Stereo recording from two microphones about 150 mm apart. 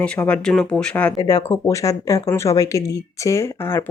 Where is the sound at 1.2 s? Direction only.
20° left (ahead or behind).